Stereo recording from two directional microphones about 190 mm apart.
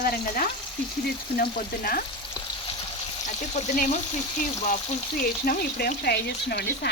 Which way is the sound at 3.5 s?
40° left (ahead or behind).